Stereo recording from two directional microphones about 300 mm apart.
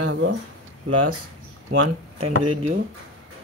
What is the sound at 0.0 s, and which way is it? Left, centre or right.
Speech, right.